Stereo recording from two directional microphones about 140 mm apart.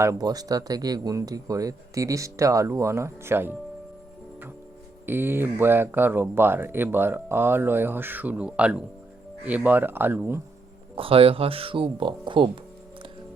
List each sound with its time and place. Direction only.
0.0 s speech: 25° right (ahead or behind)
5.0 s speech: 15° right (ahead or behind)
10.9 s speech: 40° right (ahead or behind)